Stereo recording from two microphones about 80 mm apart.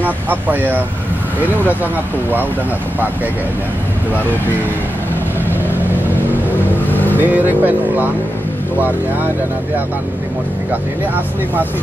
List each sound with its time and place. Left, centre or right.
0.0 s speech: right
6.9 s vehicle: left
7.2 s speech: right